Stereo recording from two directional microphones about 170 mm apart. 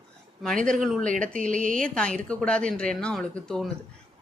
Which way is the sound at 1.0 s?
50° right (ahead or behind).